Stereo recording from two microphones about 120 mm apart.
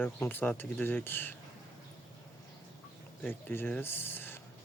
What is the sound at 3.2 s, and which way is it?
Speech, 15° left (ahead or behind).